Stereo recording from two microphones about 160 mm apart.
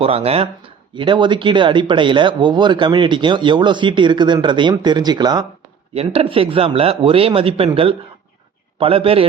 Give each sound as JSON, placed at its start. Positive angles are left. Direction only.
{"t": 0.0, "sound": "speech", "side_deg": -40}
{"t": 5.9, "sound": "speech", "side_deg": -35}